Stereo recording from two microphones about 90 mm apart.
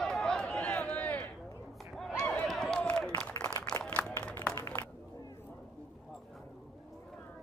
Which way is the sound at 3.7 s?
30° left (ahead or behind).